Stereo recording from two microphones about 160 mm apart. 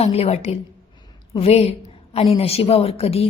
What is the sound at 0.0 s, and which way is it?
A woman's voice, 40° left (ahead or behind).